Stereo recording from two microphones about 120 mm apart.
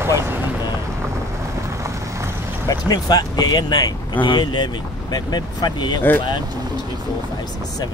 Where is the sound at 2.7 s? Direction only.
35° left (ahead or behind).